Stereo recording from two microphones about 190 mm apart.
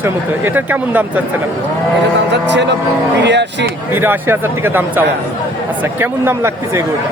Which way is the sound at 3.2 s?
65° right (ahead or behind).